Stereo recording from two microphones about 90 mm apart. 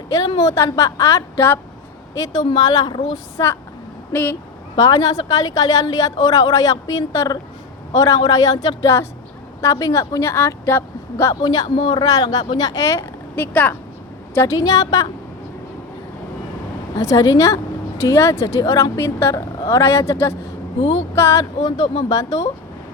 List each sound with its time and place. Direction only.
0.3 s speech: 35° left (ahead or behind)
2.4 s a woman's voice: 55° left (ahead or behind)
4.1 s speech: 20° left (ahead or behind)
4.8 s a woman's voice: 45° left (ahead or behind); by 11.3 s 25° left (ahead or behind)
11.4 s a woman's voice: 55° left (ahead or behind)
12.0 s a woman's voice: 45° left (ahead or behind); by 13.7 s 20° left (ahead or behind)
14.3 s a woman's voice: 35° left (ahead or behind)
16.9 s speech: 40° left (ahead or behind)
21.6 s a woman's voice: 50° left (ahead or behind)